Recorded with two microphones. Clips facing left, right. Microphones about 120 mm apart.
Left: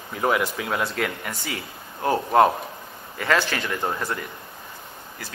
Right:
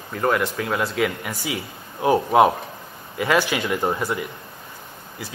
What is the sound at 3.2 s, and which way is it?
Speech, 10° right (ahead or behind).